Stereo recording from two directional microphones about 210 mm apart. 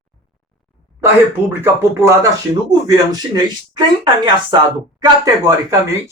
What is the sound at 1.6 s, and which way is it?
Speech, 10° right (ahead or behind).